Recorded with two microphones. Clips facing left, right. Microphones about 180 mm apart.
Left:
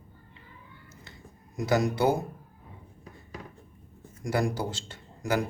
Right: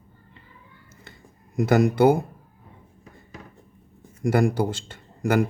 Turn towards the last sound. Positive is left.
turn(degrees=-55)  # may be behind; listen again after turning